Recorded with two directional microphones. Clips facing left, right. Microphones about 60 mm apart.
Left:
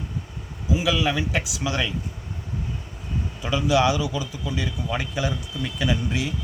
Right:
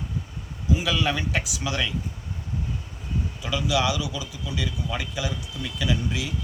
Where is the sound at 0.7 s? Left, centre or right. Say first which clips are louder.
Left 2 dB; centre.